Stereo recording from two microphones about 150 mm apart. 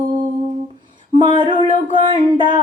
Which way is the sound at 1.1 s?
30° right (ahead or behind).